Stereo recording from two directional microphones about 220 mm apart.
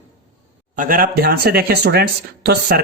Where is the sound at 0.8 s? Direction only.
40° right (ahead or behind).